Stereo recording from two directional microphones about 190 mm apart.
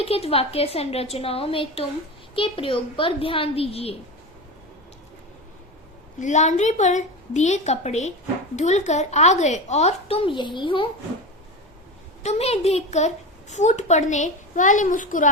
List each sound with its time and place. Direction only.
0.0 s a child's voice: 30° left (ahead or behind)
6.1 s a child's voice: 40° left (ahead or behind)
12.2 s a child's voice: 35° left (ahead or behind)